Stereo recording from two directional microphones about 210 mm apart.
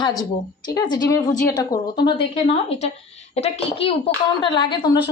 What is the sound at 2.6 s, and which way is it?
A woman's voice, 30° left (ahead or behind).